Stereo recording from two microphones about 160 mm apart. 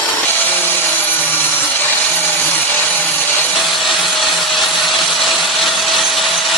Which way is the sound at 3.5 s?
Centre (ahead or behind).